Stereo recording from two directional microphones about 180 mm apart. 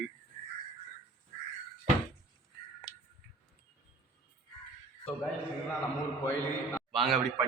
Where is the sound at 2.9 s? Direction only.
20° left (ahead or behind).